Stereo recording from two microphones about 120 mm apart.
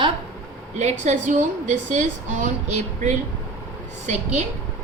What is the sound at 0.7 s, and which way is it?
A woman's voice, 70° right (ahead or behind).